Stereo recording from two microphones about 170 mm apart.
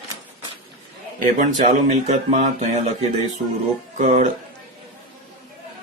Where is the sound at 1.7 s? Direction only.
45° right (ahead or behind).